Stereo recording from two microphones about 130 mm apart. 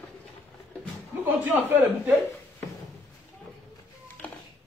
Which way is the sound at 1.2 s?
15° right (ahead or behind).